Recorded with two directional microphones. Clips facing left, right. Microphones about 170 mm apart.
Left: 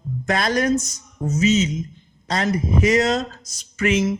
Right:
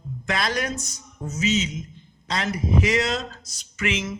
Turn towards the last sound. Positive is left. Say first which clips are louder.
# left 8 dB
turn(degrees=40)  # may be behind; listen again after turning